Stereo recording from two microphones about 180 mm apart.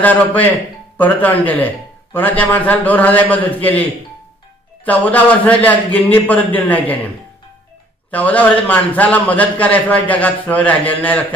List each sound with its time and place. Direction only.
0.0 s a man's voice: 10° left (ahead or behind)
4.8 s a man's voice: 10° left (ahead or behind)
8.1 s a man's voice: 10° left (ahead or behind)